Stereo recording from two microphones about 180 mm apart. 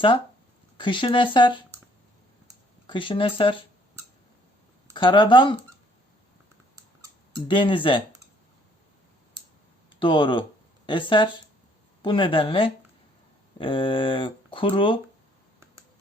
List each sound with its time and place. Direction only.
0.8 s speech: 25° left (ahead or behind)
2.8 s speech: 30° left (ahead or behind)
4.9 s speech: 25° left (ahead or behind)
7.4 s speech: 30° left (ahead or behind)
9.9 s speech: 30° left (ahead or behind)